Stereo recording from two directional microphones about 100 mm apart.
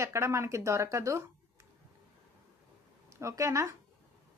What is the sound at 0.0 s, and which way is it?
Speech, 30° right (ahead or behind).